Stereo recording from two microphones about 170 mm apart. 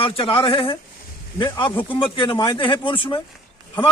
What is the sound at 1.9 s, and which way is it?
Speech, 30° left (ahead or behind).